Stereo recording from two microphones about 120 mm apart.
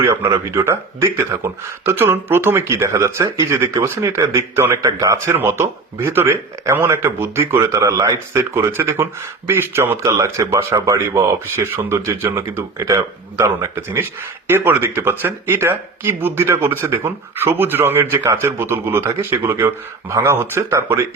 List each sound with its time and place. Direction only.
0.0 s speech: 20° right (ahead or behind)